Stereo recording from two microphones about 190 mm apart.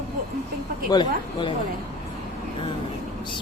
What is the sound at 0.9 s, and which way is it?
Speech, 25° left (ahead or behind).